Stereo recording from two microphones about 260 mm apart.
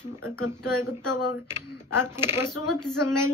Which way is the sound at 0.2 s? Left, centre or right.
Centre.